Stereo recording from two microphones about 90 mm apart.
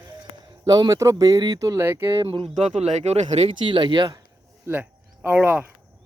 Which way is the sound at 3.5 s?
65° right (ahead or behind).